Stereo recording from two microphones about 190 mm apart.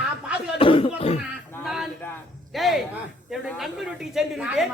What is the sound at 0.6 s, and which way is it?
Speech, 30° left (ahead or behind).